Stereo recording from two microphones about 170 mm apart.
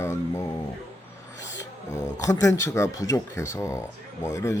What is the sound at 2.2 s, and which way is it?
Speech, 20° left (ahead or behind).